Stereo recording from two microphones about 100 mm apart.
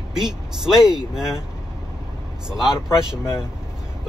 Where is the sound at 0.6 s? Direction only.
5° right (ahead or behind).